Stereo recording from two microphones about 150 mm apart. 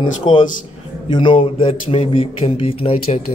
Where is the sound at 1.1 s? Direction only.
35° left (ahead or behind).